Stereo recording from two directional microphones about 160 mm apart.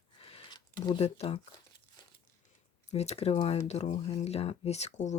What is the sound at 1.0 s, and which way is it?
Speech, 40° left (ahead or behind).